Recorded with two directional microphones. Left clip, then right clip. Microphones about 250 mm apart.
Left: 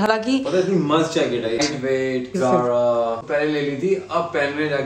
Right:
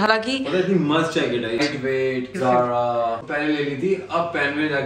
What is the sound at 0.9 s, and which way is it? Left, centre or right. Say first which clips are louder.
A man's voice: left 2 dB; centre.